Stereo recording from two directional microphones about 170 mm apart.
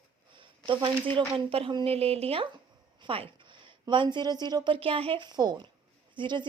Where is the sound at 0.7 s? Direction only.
30° right (ahead or behind).